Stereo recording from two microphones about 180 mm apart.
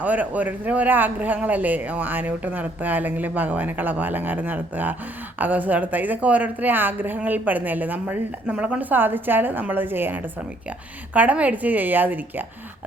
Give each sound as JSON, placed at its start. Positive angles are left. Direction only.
{"t": 0.0, "sound": "speech", "side_deg": -10}